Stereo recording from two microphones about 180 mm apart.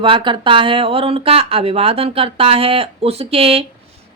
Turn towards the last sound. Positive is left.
turn(degrees=-30)  # may be behind; listen again after turning